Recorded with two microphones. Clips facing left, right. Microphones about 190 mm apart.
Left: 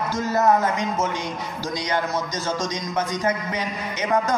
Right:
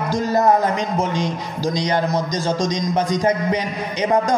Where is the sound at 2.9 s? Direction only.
35° right (ahead or behind).